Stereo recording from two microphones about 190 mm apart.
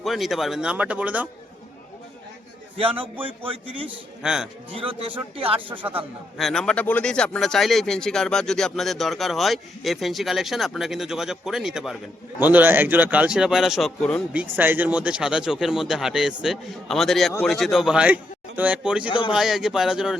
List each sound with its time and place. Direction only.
0.0 s a man's voice: centre (ahead or behind)
2.9 s speech: 10° right (ahead or behind)
3.2 s speech: 30° right (ahead or behind)
4.2 s a man's voice: 5° right (ahead or behind)
4.7 s speech: 30° right (ahead or behind)
5.7 s a man's voice: 10° right (ahead or behind)
14.6 s a man's voice: 10° right (ahead or behind)
19.0 s speech: 25° left (ahead or behind)
19.3 s a man's voice: centre (ahead or behind)